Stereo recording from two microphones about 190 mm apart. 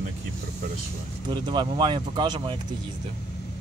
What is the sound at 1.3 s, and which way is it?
Speech, 25° right (ahead or behind).